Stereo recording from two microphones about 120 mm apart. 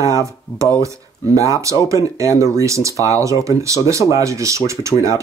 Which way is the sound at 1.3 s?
25° right (ahead or behind).